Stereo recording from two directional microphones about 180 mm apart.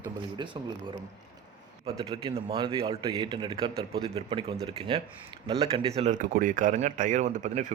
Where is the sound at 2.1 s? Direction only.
30° right (ahead or behind).